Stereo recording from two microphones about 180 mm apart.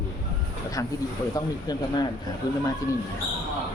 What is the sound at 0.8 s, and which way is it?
Speech, 15° left (ahead or behind).